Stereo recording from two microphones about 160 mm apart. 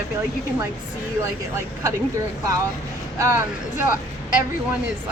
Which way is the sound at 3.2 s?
15° right (ahead or behind).